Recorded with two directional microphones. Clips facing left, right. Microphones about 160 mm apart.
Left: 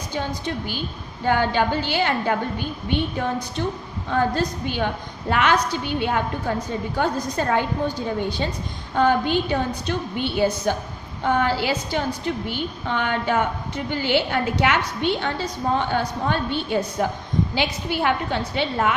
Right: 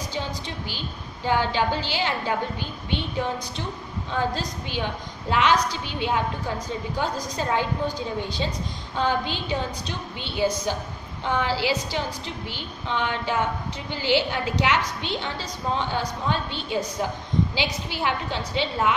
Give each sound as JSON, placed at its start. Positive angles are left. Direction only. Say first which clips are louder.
{"t": 0.1, "sound": "a woman's voice", "louder": "left 9 dB", "side_deg": 50}